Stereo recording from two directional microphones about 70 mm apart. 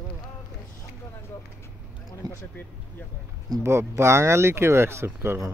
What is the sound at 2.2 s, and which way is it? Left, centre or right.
Speech, right.